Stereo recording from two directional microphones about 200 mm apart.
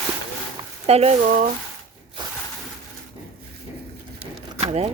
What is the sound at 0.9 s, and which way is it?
Speech, 30° right (ahead or behind).